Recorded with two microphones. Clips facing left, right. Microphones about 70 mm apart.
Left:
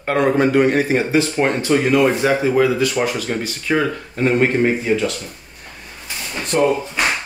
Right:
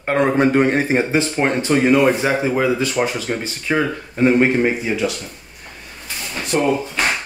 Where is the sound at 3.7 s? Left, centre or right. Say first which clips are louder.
Left 1 dB; centre.